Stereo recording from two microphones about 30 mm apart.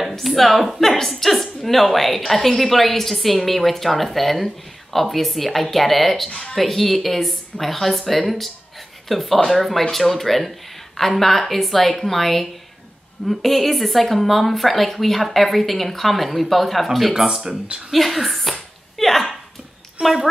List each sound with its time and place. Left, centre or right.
0.2 s a woman's voice: centre
17.9 s a sound: centre
20.0 s a woman's voice: right